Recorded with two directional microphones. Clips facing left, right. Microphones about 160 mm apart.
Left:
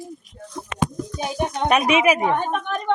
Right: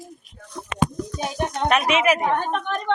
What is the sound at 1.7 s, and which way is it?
Speech, 15° left (ahead or behind).